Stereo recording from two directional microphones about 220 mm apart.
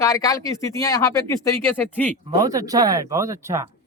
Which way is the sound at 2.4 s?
15° right (ahead or behind).